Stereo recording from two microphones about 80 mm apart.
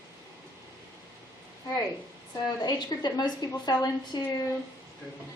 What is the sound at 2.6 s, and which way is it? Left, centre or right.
A woman's voice, left.